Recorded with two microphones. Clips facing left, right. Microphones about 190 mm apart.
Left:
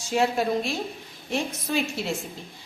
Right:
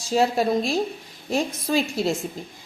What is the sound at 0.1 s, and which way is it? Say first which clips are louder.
Speech: right 3 dB; 35° right (ahead or behind).